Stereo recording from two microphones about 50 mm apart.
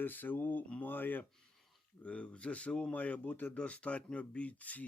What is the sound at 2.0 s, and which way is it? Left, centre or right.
Speech, left.